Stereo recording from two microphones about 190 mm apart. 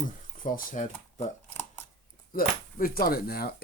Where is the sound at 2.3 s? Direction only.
50° left (ahead or behind).